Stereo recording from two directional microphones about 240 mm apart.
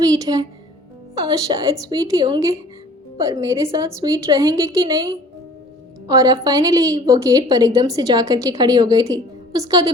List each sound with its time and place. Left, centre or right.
0.0 s a woman's voice: centre